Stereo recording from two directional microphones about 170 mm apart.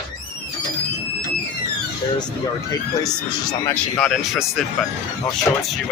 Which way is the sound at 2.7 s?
20° left (ahead or behind).